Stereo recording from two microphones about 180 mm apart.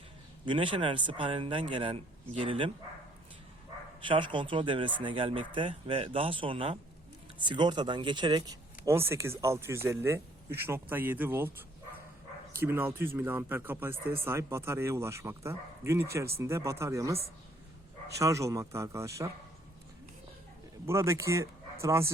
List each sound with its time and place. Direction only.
0.4 s speech: 25° right (ahead or behind)
4.0 s speech: 25° right (ahead or behind)
12.6 s speech: 10° right (ahead or behind)
18.2 s speech: 15° right (ahead or behind)
20.8 s speech: 15° right (ahead or behind)